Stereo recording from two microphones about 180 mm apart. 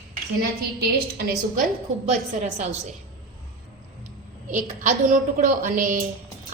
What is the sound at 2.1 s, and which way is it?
Speech, 40° right (ahead or behind).